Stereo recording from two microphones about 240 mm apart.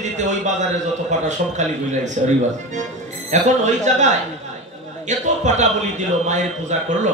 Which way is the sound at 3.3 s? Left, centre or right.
Right.